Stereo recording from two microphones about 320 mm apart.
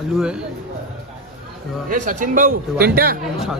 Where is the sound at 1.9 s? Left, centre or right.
Right.